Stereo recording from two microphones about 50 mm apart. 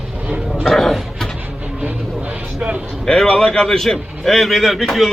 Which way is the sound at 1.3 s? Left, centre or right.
Right.